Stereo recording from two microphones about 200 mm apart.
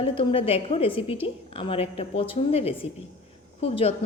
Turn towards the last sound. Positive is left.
turn(degrees=30)  # may be behind; listen again after turning